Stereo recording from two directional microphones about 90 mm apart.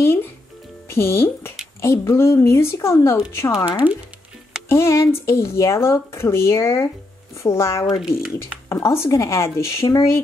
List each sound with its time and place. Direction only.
0.0 s speech: 25° left (ahead or behind)
3.8 s speech: 20° right (ahead or behind)
4.6 s speech: 30° left (ahead or behind)